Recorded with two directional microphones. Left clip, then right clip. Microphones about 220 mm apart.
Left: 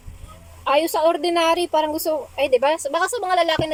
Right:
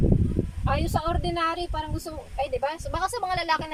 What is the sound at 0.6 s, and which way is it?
A woman's voice, 45° left (ahead or behind).